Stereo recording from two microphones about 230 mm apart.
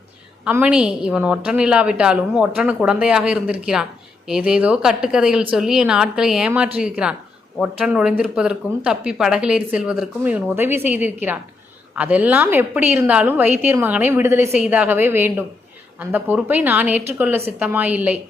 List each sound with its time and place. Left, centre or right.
0.4 s a woman's voice: centre